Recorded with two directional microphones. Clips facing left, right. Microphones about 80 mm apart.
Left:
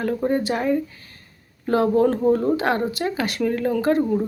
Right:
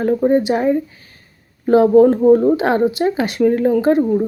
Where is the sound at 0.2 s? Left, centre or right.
Centre.